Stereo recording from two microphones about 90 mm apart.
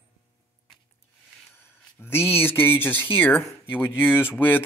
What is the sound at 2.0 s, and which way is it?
Speech, 25° left (ahead or behind).